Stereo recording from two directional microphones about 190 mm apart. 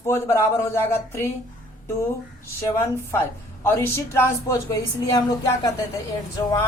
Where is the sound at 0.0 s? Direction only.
15° left (ahead or behind).